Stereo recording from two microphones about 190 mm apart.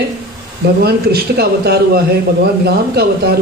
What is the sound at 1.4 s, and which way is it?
Speech, 55° right (ahead or behind).